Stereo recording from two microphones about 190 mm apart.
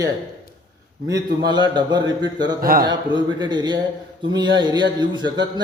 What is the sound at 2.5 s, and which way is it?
Speech, 50° right (ahead or behind).